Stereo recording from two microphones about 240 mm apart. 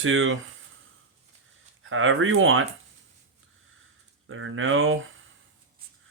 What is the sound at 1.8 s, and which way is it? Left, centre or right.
Speech, right.